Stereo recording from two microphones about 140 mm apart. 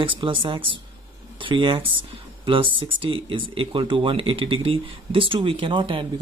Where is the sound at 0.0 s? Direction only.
35° right (ahead or behind).